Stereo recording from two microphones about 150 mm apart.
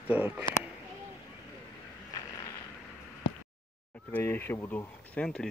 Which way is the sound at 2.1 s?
20° left (ahead or behind).